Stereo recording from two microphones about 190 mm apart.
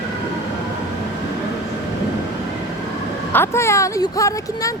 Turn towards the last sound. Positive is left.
turn(degrees=15)  # may be behind; listen again after turning